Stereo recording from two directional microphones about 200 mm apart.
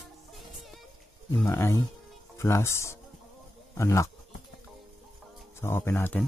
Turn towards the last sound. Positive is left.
turn(degrees=10)  # may be behind; listen again after turning